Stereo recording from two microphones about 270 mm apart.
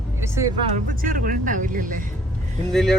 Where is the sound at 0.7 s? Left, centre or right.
Right.